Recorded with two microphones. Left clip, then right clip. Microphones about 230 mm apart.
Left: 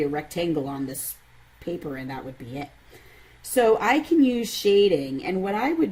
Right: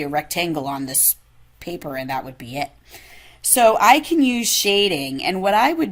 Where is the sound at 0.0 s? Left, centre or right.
Centre.